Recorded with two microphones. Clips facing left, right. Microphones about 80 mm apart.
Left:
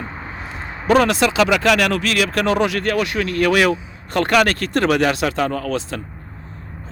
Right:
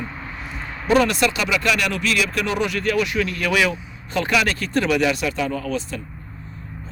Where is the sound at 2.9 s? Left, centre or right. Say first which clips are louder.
Left 1 dB; left.